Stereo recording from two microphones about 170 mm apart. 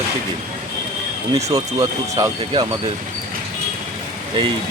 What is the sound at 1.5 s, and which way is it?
Speech, 20° right (ahead or behind).